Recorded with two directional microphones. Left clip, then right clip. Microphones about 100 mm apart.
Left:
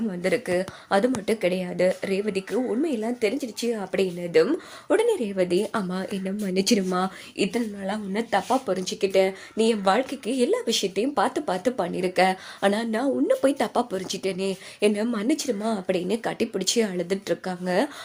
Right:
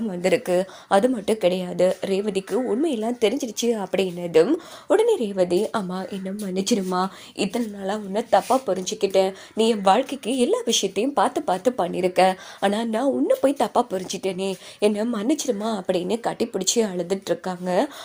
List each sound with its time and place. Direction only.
0.2 s a woman's voice: 45° right (ahead or behind)
0.9 s a woman's voice: 30° right (ahead or behind)
3.2 s a woman's voice: 45° right (ahead or behind)
4.9 s speech: 15° right (ahead or behind)
5.5 s speech: centre (ahead or behind)
6.0 s speech: 10° left (ahead or behind)
7.3 s speech: 15° right (ahead or behind)